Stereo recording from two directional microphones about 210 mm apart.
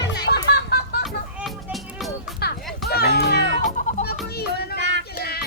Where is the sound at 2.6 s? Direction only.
Centre (ahead or behind).